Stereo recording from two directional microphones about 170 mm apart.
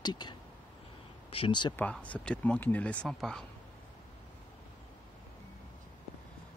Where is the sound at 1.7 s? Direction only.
10° left (ahead or behind).